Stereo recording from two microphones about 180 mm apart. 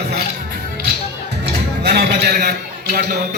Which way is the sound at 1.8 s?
60° right (ahead or behind).